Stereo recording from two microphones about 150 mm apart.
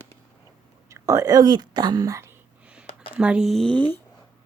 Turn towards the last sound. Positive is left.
turn(degrees=5)  # may be behind; listen again after turning